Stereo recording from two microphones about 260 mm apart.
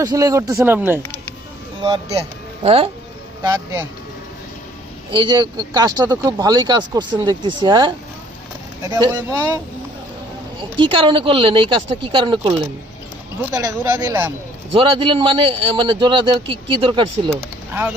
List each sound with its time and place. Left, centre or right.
0.0 s a man's voice: centre
3.4 s speech: centre
5.1 s speech: centre
10.6 s a man's voice: centre
14.7 s a man's voice: right
17.7 s speech: centre